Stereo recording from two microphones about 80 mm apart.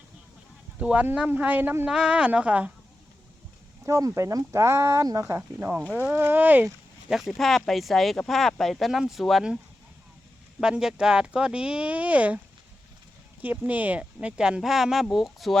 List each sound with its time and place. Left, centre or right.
0.8 s speech: centre
1.9 s speech: centre
3.8 s speech: right
5.5 s speech: right
7.1 s speech: centre
10.6 s speech: centre
13.4 s speech: right; by 15.5 s centre